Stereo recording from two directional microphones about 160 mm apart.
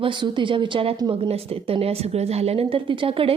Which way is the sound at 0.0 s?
30° right (ahead or behind).